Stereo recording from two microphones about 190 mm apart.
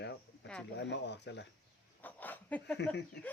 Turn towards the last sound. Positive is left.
turn(degrees=65)  # may be behind; listen again after turning